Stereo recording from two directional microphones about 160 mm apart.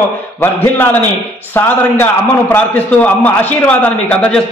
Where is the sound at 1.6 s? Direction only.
15° left (ahead or behind).